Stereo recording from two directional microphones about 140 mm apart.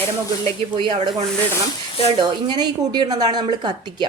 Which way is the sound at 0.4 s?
40° right (ahead or behind).